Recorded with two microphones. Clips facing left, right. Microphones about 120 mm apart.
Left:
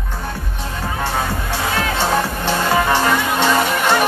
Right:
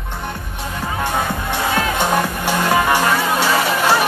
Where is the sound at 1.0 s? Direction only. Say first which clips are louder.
Right 1 dB; 15° right (ahead or behind).